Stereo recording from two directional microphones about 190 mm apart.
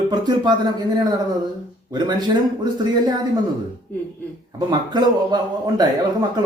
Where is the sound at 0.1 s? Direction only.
20° right (ahead or behind).